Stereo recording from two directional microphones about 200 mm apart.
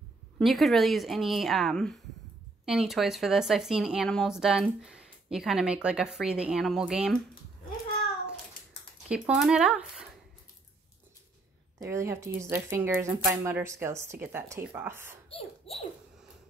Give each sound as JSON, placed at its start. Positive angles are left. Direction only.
{"t": 0.4, "sound": "speech", "side_deg": 0}
{"t": 9.1, "sound": "speech", "side_deg": -5}
{"t": 11.8, "sound": "speech", "side_deg": -15}
{"t": 15.2, "sound": "a sound", "side_deg": 30}